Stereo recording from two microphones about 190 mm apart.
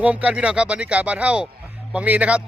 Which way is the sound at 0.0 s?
5° right (ahead or behind).